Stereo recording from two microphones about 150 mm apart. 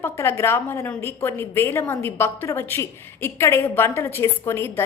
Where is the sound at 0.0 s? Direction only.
15° left (ahead or behind).